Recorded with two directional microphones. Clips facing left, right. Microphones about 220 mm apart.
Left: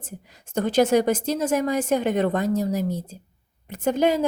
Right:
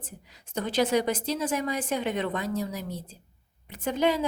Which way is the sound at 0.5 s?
45° left (ahead or behind).